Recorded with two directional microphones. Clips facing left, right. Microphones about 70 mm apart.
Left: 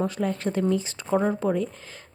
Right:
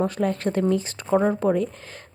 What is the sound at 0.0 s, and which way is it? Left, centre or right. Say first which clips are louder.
A woman's voice: right 3 dB; right.